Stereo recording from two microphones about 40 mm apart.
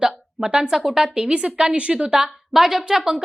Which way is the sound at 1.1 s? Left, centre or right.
Right.